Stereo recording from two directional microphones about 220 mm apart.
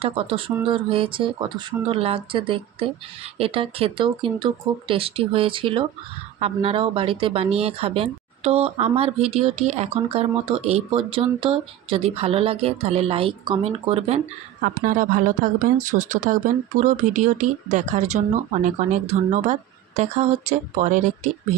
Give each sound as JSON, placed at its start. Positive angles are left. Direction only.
{"t": 0.0, "sound": "speech", "side_deg": -25}
{"t": 14.6, "sound": "speech", "side_deg": -40}